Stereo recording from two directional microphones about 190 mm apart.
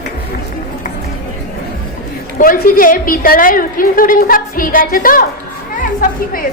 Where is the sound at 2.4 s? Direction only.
50° left (ahead or behind).